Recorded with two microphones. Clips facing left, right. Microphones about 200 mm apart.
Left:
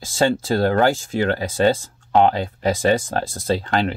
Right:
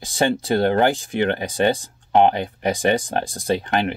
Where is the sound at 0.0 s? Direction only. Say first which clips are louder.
Left 1 dB; 15° right (ahead or behind).